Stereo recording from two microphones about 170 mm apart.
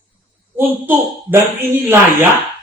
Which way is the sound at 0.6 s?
10° right (ahead or behind).